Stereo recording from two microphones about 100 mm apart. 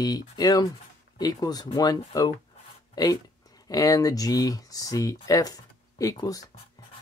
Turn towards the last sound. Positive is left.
turn(degrees=40)  # may be behind; listen again after turning